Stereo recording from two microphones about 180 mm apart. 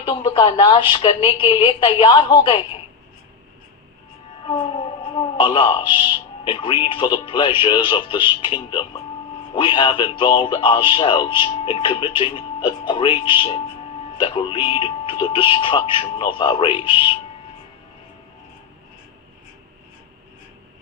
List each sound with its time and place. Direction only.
0.0 s speech: 25° left (ahead or behind)
5.2 s speech: 25° left (ahead or behind)